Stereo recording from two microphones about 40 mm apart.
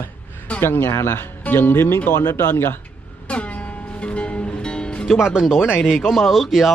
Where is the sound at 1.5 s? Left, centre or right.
Left.